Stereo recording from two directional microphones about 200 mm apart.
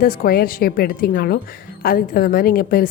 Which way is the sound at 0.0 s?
45° left (ahead or behind).